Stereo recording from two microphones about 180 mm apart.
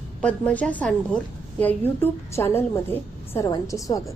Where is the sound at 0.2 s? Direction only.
5° left (ahead or behind).